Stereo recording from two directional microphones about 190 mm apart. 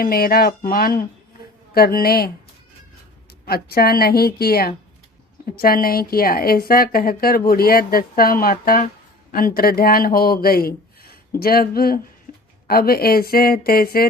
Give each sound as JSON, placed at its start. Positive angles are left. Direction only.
{"t": 0.0, "sound": "a woman's voice", "side_deg": 50}
{"t": 3.4, "sound": "a woman's voice", "side_deg": 55}